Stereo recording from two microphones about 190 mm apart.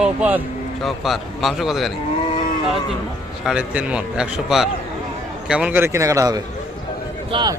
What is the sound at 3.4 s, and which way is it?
A man's voice, 5° right (ahead or behind).